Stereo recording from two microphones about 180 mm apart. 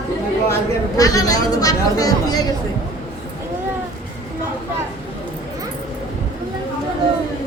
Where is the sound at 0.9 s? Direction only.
20° left (ahead or behind).